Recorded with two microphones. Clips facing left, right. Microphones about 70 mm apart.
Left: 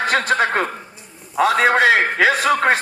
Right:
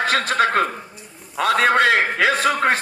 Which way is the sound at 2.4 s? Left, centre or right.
Left.